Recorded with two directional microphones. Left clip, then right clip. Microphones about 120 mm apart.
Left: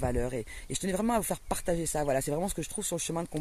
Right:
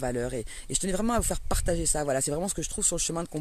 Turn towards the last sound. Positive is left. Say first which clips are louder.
# right 3 dB
turn(degrees=-25)  # may be behind; listen again after turning